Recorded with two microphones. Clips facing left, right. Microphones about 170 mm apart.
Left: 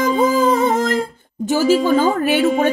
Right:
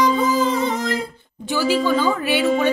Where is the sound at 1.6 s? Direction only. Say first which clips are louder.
Left 4 dB; 45° left (ahead or behind).